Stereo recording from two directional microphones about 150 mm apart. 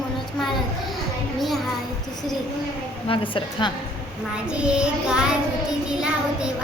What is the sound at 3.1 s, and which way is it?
Speech, 35° left (ahead or behind).